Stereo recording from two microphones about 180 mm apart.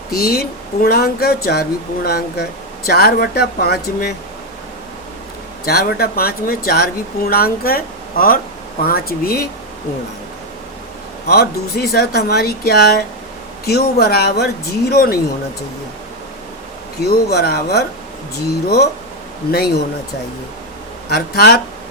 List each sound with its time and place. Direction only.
0.1 s speech: 55° left (ahead or behind)
5.6 s speech: 60° left (ahead or behind)
11.3 s speech: 60° left (ahead or behind)
17.0 s speech: 60° left (ahead or behind)
19.5 s speech: 60° left (ahead or behind)
21.1 s speech: 60° left (ahead or behind)